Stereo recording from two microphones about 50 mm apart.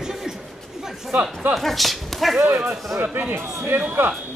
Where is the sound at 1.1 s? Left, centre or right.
Right.